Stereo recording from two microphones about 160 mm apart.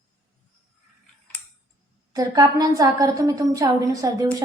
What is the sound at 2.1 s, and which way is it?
A woman's voice, 25° right (ahead or behind).